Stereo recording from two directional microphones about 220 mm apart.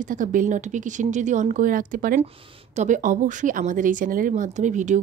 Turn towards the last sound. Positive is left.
turn(degrees=-35)  # may be behind; listen again after turning